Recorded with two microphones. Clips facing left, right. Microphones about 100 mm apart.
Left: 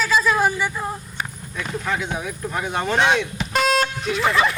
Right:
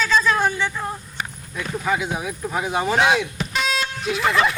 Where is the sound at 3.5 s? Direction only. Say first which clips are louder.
Left 6 dB; 45° left (ahead or behind).